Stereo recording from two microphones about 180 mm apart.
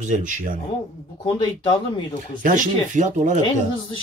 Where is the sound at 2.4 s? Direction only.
45° right (ahead or behind).